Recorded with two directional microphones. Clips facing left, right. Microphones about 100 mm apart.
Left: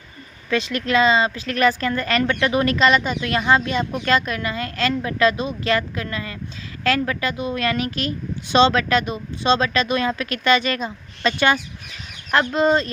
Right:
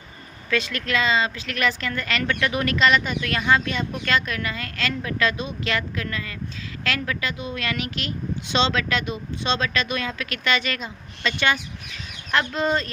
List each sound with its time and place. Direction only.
0.5 s speech: 25° left (ahead or behind)